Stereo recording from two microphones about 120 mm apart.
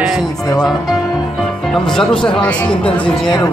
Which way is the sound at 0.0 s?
Centre (ahead or behind).